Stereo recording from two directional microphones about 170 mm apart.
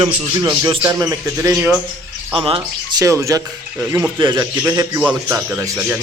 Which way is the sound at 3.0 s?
20° right (ahead or behind).